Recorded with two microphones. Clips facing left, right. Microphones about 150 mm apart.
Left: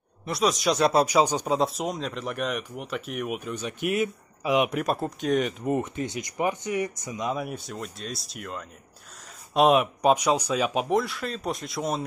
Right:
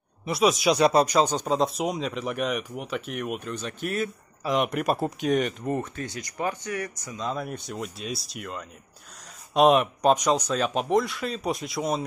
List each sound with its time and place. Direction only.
0.2 s speech: 5° right (ahead or behind)
5.6 s speech: 15° left (ahead or behind)